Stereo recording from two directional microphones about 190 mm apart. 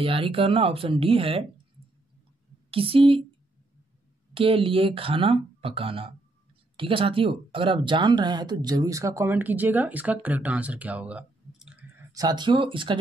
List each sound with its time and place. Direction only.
0.0 s speech: 30° right (ahead or behind)
2.7 s speech: 30° right (ahead or behind)
4.3 s speech: 30° right (ahead or behind); by 11.8 s 5° right (ahead or behind)
12.1 s speech: 20° right (ahead or behind)